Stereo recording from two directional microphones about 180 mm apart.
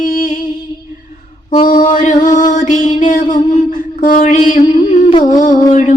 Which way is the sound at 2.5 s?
45° left (ahead or behind).